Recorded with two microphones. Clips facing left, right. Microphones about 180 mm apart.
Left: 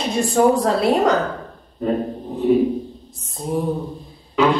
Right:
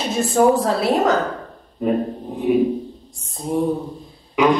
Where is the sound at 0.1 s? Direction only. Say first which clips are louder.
Even; centre (ahead or behind).